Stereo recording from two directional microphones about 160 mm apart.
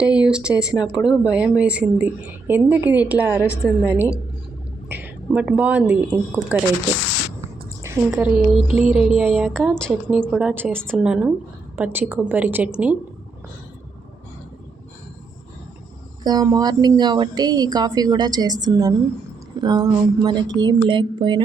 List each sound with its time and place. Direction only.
0.0 s speech: 5° right (ahead or behind)
8.1 s speech: centre (ahead or behind)
8.6 s music: 40° left (ahead or behind)
9.0 s speech: 5° right (ahead or behind)
10.1 s speech: 10° right (ahead or behind)
10.8 s speech: 5° left (ahead or behind)
11.0 s speech: 5° right (ahead or behind)
16.2 s a woman's voice: 25° right (ahead or behind)